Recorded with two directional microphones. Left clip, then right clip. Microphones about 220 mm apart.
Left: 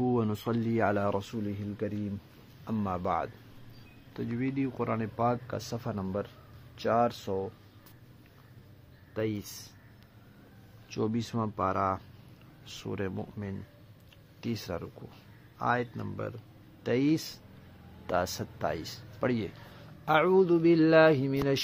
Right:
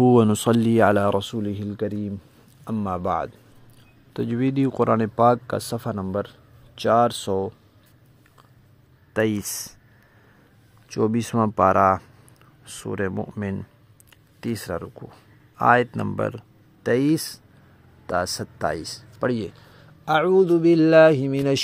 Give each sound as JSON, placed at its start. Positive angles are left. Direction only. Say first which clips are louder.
{"t": 0.0, "sound": "speech", "louder": "right 13 dB", "side_deg": -45}
{"t": 2.6, "sound": "speech", "louder": "right 7 dB", "side_deg": -30}
{"t": 4.1, "sound": "speech", "louder": "right 10 dB", "side_deg": -40}
{"t": 9.1, "sound": "speech", "louder": "right 11 dB", "side_deg": -50}
{"t": 11.0, "sound": "speech", "louder": "right 11 dB", "side_deg": -35}
{"t": 12.6, "sound": "speech", "louder": "right 9 dB", "side_deg": -25}
{"t": 14.4, "sound": "speech", "louder": "right 8 dB", "side_deg": -25}
{"t": 15.5, "sound": "speech", "louder": "right 13 dB", "side_deg": -40}